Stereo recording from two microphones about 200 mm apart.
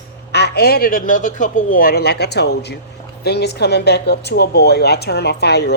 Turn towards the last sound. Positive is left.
turn(degrees=55)  # may be behind; listen again after turning